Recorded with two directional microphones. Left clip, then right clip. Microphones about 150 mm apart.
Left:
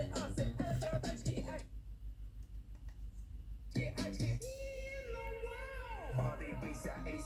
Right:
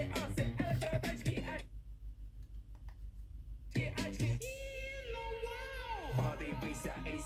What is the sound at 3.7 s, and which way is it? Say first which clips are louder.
Music: right 2 dB; 15° right (ahead or behind).